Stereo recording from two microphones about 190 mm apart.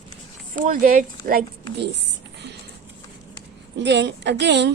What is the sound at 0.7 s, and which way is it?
Speech, 45° right (ahead or behind).